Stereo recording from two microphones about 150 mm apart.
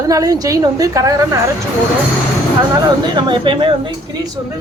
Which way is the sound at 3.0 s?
30° right (ahead or behind).